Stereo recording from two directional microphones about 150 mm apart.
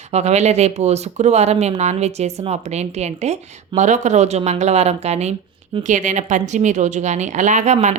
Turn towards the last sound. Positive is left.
turn(degrees=-50)  # may be behind; listen again after turning